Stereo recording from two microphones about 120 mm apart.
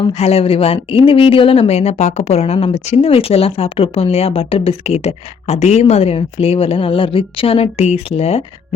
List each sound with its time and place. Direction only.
0.1 s speech: 60° left (ahead or behind)